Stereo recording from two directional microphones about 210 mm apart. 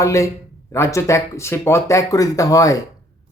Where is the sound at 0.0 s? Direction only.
15° left (ahead or behind).